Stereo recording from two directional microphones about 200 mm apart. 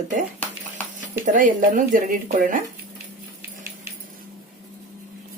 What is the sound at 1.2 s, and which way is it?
Speech, 40° right (ahead or behind).